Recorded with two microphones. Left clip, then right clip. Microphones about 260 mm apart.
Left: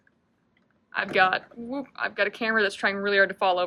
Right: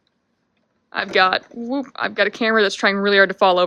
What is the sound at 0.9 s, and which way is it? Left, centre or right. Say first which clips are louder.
Speech: right 5 dB; centre.